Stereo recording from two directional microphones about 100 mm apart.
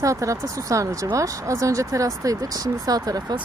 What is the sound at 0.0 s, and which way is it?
Speech, 30° right (ahead or behind).